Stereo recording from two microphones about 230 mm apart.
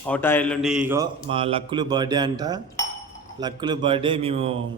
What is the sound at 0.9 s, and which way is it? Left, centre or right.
A man's voice, right.